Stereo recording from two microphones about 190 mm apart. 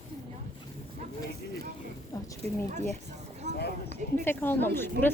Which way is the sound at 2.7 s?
35° right (ahead or behind).